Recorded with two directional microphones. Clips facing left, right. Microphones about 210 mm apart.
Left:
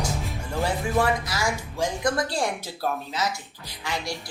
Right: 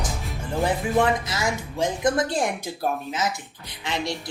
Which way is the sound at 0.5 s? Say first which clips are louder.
Right 3 dB; 20° right (ahead or behind).